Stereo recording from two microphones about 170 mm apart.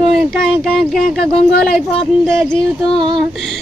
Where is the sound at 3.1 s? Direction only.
Centre (ahead or behind).